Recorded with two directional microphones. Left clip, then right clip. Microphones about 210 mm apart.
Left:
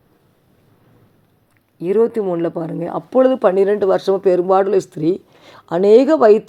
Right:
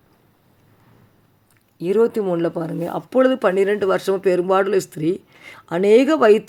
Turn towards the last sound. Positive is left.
turn(degrees=-10)  # may be behind; listen again after turning